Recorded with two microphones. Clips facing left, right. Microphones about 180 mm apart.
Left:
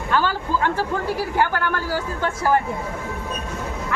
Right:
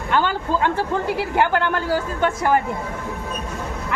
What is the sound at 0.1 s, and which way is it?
Speech, 20° right (ahead or behind).